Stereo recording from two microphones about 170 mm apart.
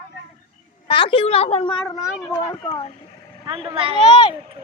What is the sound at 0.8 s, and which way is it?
A woman's voice, 30° left (ahead or behind).